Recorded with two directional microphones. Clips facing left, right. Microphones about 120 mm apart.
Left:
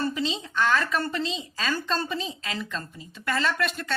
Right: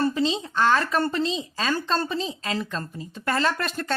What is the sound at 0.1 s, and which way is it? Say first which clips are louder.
A woman's voice: right 5 dB; 35° right (ahead or behind).